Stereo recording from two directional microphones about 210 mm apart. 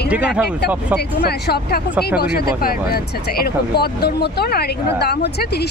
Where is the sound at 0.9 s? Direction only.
50° left (ahead or behind).